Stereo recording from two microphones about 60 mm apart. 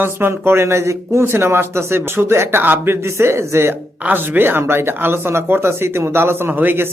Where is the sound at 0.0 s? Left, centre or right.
Right.